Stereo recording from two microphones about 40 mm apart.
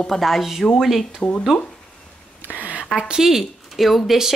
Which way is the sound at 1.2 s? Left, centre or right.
Left.